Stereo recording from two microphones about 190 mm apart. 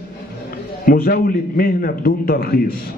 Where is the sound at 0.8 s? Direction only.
50° left (ahead or behind).